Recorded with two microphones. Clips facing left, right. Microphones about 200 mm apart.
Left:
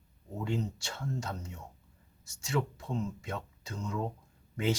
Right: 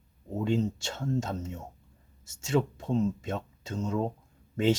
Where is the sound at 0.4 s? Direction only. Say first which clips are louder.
Right 6 dB; 25° right (ahead or behind).